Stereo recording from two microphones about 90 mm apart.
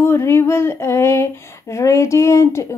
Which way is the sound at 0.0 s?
30° left (ahead or behind).